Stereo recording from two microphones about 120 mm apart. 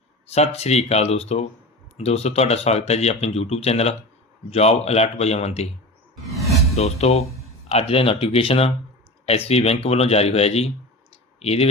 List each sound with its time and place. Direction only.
0.3 s speech: 60° left (ahead or behind)
6.7 s speech: 60° left (ahead or behind)